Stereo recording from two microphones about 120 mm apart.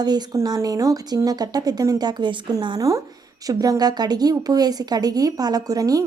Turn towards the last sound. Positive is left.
turn(degrees=-30)  # may be behind; listen again after turning